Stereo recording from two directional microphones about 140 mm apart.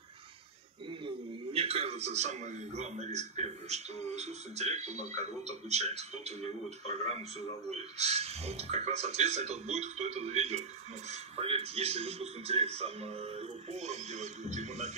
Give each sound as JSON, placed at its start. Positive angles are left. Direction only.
{"t": 0.8, "sound": "a man's voice", "side_deg": -40}